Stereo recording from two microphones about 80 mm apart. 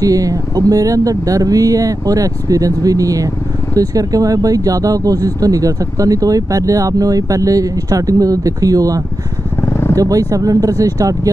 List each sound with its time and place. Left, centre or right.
0.0 s speech: right
9.6 s vehicle: left
9.9 s speech: right